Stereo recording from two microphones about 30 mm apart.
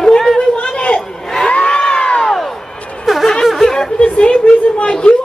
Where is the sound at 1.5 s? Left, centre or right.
Left.